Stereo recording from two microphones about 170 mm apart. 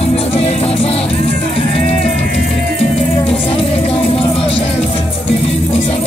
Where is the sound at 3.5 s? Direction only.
35° left (ahead or behind).